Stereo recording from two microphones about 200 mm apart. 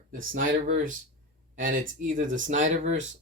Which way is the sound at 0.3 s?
40° right (ahead or behind).